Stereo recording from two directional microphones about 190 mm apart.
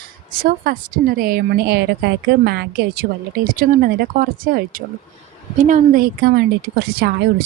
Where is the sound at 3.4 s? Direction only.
45° right (ahead or behind).